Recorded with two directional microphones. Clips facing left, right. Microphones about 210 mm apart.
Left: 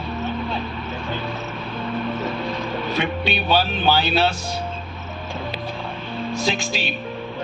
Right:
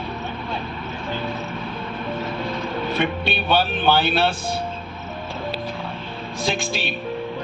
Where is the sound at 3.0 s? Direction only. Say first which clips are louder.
Left 1 dB; 55° right (ahead or behind).